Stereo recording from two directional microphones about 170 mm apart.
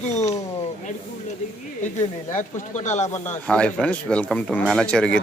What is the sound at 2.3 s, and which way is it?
Speech, 45° left (ahead or behind).